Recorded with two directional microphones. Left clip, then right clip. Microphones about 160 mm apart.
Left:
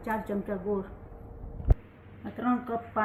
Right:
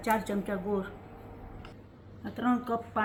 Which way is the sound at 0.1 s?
30° right (ahead or behind).